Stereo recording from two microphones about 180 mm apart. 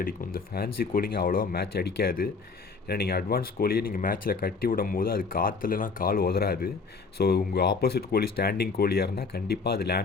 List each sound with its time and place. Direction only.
0.0 s speech: 55° left (ahead or behind)